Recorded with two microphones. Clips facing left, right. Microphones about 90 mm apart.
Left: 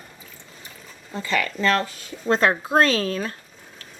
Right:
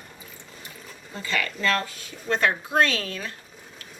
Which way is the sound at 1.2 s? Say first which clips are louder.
Left 4 dB; 30° left (ahead or behind).